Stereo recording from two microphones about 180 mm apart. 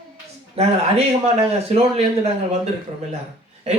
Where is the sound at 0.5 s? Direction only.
35° right (ahead or behind).